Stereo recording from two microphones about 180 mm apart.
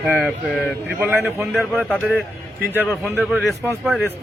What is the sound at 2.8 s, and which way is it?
Speech, 10° right (ahead or behind).